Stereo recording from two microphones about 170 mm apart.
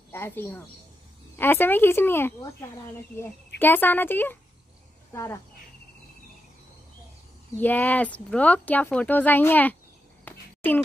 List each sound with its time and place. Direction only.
0.1 s a woman's voice: 15° left (ahead or behind)
3.5 s speech: 10° left (ahead or behind)
7.5 s speech: 10° left (ahead or behind)
10.2 s a sound: 10° left (ahead or behind)